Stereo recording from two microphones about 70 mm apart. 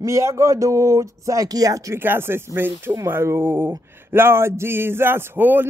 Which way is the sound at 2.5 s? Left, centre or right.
Right.